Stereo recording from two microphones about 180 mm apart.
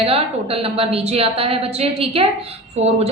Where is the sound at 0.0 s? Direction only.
30° right (ahead or behind).